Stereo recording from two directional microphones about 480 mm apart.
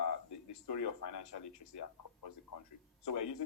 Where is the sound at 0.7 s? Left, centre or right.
Left.